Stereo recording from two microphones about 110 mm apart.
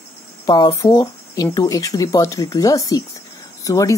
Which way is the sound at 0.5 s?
40° left (ahead or behind).